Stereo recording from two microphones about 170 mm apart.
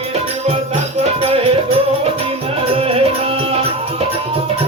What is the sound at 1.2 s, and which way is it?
Music, 35° right (ahead or behind).